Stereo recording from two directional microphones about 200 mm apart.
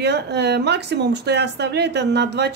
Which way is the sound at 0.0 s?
55° right (ahead or behind).